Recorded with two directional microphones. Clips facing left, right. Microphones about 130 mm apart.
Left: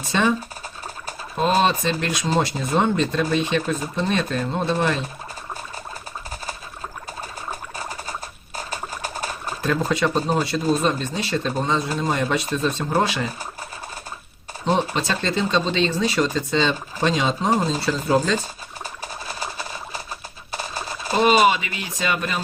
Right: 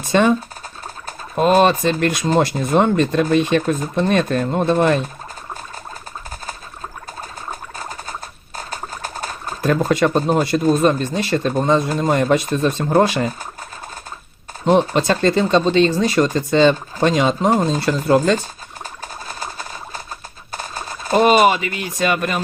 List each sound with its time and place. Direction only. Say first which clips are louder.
0.1 s speech: right 6 dB; 50° right (ahead or behind)
1.4 s speech: right 6 dB; 55° right (ahead or behind)
9.6 s speech: right 5 dB; 50° right (ahead or behind)
14.6 s speech: right 6 dB; 50° right (ahead or behind)
20.6 s a sound: right 1 dB; 5° left (ahead or behind)
21.1 s speech: right 4 dB; 50° right (ahead or behind)